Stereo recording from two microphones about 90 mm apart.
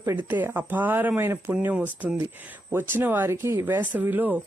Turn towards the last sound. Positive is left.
turn(degrees=-20)  # may be behind; listen again after turning